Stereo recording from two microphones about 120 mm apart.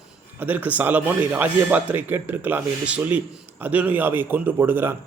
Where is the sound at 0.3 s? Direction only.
15° right (ahead or behind).